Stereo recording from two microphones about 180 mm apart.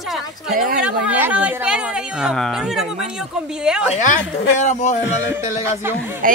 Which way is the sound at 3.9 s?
40° left (ahead or behind).